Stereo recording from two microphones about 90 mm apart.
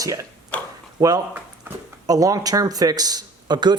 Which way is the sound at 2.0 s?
40° right (ahead or behind).